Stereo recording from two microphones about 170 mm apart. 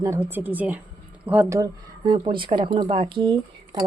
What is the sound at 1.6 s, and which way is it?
Speech, 25° right (ahead or behind).